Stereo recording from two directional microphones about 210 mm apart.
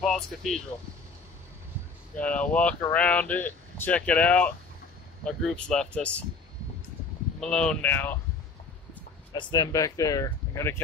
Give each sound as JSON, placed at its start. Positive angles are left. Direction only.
{"t": 0.0, "sound": "speech", "side_deg": 0}
{"t": 2.1, "sound": "speech", "side_deg": 5}
{"t": 7.3, "sound": "speech", "side_deg": 5}
{"t": 9.3, "sound": "speech", "side_deg": 20}